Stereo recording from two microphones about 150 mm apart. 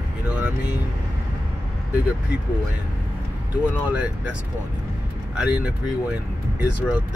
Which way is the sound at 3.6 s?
10° right (ahead or behind).